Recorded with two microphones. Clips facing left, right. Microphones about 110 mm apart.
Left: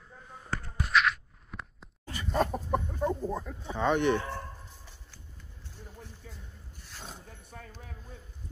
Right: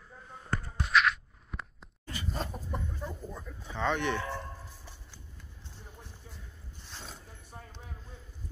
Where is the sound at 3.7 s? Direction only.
15° left (ahead or behind).